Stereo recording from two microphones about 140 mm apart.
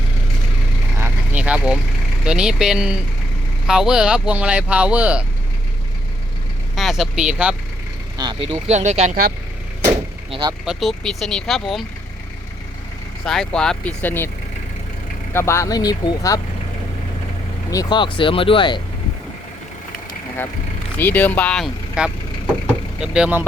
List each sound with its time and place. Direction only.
0.9 s vehicle: 15° right (ahead or behind)
2.2 s speech: 5° right (ahead or behind)
6.7 s speech: centre (ahead or behind)
8.2 s speech: 35° right (ahead or behind)
8.4 s speech: 50° right (ahead or behind)
10.7 s speech: centre (ahead or behind)
13.2 s speech: 5° left (ahead or behind)
15.3 s speech: 20° left (ahead or behind)
17.7 s speech: 30° left (ahead or behind)
21.0 s speech: 15° left (ahead or behind)
22.0 s speech: 5° right (ahead or behind)